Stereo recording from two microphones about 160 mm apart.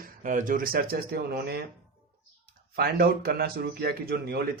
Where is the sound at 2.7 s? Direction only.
75° right (ahead or behind).